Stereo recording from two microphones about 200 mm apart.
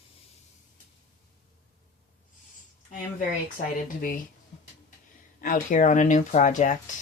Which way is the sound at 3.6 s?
40° left (ahead or behind).